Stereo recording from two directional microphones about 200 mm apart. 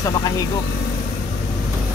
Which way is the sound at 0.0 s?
15° left (ahead or behind).